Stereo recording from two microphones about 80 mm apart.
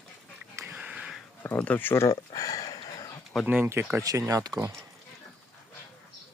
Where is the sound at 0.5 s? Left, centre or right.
Right.